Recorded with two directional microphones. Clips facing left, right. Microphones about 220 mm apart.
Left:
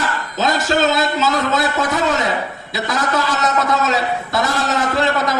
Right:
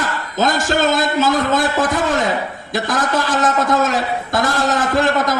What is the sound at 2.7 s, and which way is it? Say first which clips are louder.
A man's voice: right 2 dB; 50° right (ahead or behind).